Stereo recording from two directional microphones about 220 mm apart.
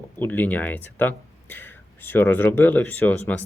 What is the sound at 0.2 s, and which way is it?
Speech, 10° left (ahead or behind).